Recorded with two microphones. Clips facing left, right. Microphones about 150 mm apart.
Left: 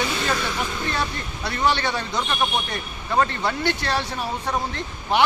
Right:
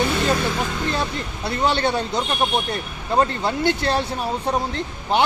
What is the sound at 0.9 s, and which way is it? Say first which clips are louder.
Speech: right 2 dB; 30° right (ahead or behind).